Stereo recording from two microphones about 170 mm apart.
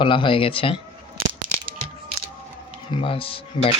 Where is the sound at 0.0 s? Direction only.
30° left (ahead or behind).